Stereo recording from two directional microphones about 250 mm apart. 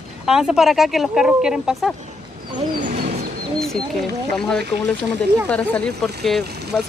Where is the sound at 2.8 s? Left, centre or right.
Right.